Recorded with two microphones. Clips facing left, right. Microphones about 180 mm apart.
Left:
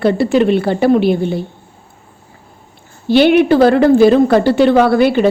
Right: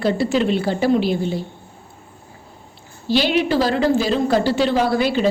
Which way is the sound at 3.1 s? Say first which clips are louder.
Left 9 dB; 60° left (ahead or behind).